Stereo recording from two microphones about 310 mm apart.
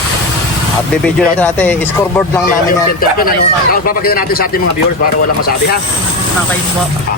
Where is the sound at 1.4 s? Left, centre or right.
Centre.